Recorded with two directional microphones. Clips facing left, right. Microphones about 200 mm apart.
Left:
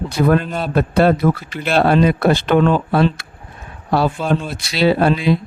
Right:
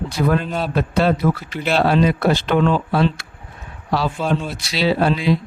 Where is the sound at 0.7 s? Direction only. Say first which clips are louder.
Left 5 dB; 55° left (ahead or behind).